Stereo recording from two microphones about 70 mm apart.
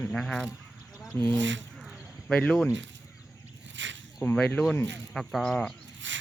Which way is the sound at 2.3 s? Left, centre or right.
Centre.